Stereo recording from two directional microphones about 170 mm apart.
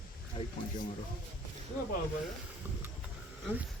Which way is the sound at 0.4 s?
40° left (ahead or behind).